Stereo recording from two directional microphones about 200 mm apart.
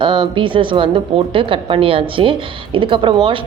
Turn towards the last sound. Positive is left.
turn(degrees=-25)  # may be behind; listen again after turning